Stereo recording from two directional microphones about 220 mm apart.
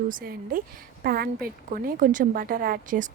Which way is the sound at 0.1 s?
40° right (ahead or behind).